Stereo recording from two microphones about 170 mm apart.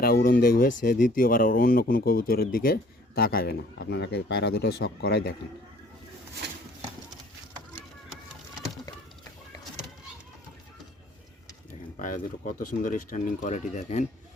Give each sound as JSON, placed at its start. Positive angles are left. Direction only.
{"t": 0.0, "sound": "speech", "side_deg": 60}
{"t": 8.9, "sound": "a sound", "side_deg": 20}
{"t": 11.7, "sound": "speech", "side_deg": 50}